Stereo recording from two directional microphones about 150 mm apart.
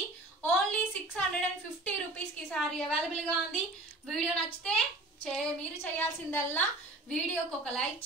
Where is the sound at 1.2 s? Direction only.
5° left (ahead or behind).